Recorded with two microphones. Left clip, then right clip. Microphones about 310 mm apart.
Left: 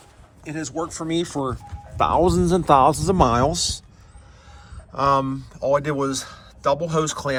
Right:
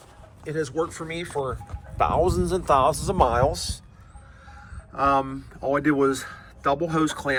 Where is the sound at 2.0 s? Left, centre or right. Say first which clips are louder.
Left 3 dB; left.